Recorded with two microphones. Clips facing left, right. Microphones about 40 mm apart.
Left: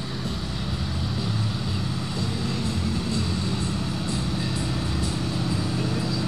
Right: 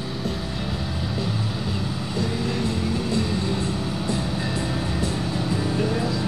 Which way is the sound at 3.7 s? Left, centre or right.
Centre.